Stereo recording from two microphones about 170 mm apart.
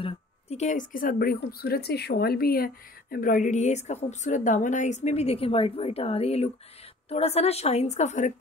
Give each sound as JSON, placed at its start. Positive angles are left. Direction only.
{"t": 0.0, "sound": "a woman's voice", "side_deg": 40}